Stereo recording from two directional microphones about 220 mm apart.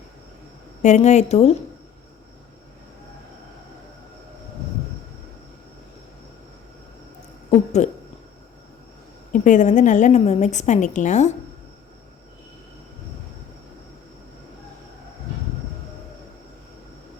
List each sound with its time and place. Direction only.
0.8 s a woman's voice: 30° left (ahead or behind)
7.5 s speech: 30° left (ahead or behind)
9.3 s a woman's voice: 35° left (ahead or behind)